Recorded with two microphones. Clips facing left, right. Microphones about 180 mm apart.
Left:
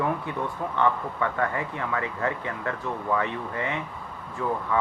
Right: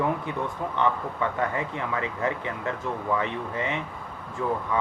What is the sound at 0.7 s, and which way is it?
Speech, 20° right (ahead or behind).